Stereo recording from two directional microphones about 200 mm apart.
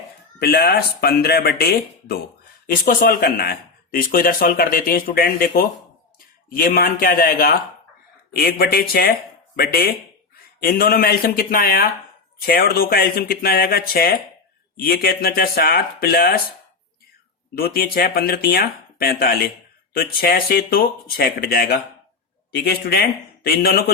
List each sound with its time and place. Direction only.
0.3 s speech: 50° left (ahead or behind)
17.6 s speech: 50° left (ahead or behind)